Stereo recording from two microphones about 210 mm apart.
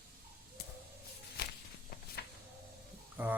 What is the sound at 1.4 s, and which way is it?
Walk, 50° left (ahead or behind).